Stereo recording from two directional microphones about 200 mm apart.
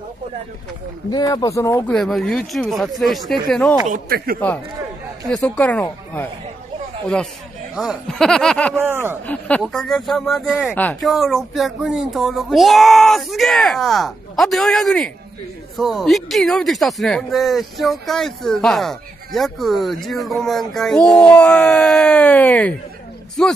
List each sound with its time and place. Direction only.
1.1 s speech: 20° left (ahead or behind)
2.0 s speech: centre (ahead or behind)
3.8 s a man's voice: 45° right (ahead or behind)
5.3 s speech: 5° left (ahead or behind)
7.7 s speech: centre (ahead or behind)
8.7 s speech: 10° right (ahead or behind)
9.2 s speech: 5° left (ahead or behind)